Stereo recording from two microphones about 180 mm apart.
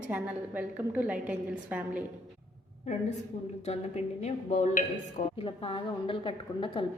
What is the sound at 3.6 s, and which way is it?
Speech, 35° left (ahead or behind).